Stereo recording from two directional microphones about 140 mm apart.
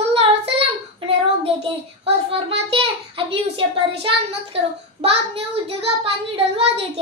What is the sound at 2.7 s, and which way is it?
A child's voice, 40° right (ahead or behind).